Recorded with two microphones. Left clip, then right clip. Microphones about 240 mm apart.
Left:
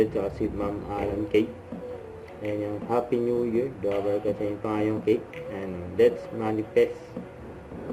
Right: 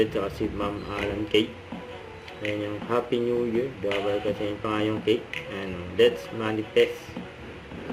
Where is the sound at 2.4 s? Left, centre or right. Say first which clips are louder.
Even; centre.